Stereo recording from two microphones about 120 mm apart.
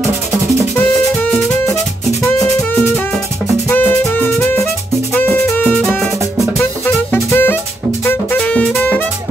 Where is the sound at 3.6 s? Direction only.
15° left (ahead or behind).